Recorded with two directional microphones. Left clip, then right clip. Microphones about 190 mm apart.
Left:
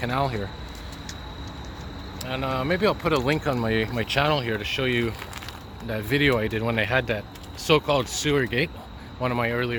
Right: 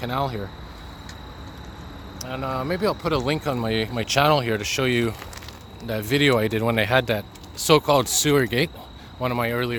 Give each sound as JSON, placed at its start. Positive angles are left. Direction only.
{"t": 0.0, "sound": "speech", "side_deg": -15}
{"t": 2.2, "sound": "speech", "side_deg": -15}